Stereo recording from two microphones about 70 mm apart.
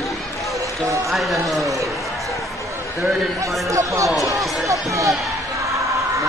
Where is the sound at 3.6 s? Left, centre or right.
Right.